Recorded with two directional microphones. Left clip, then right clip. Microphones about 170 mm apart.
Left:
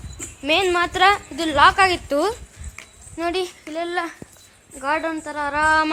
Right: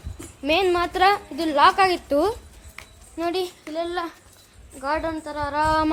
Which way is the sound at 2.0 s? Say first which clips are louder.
Even; 10° right (ahead or behind).